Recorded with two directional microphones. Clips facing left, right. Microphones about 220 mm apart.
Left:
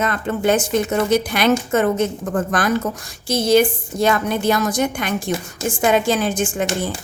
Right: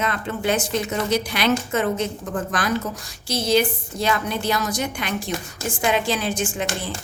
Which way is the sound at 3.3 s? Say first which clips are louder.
Left 5 dB; 50° left (ahead or behind).